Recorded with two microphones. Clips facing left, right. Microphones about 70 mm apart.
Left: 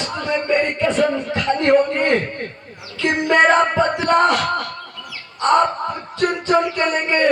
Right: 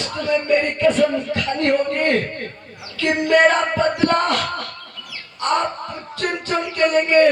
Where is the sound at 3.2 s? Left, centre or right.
Left.